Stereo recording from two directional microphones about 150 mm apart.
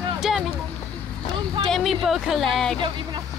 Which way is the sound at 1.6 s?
Centre (ahead or behind).